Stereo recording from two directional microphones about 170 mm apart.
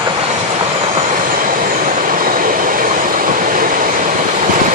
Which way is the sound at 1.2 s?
55° right (ahead or behind).